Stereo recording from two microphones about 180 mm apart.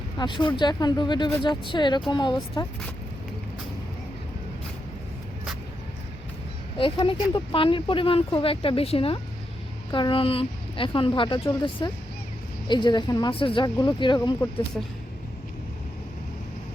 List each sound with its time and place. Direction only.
0.2 s speech: 25° left (ahead or behind)
6.7 s speech: 30° left (ahead or behind)